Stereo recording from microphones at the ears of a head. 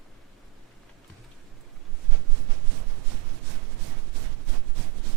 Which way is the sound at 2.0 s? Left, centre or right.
Right.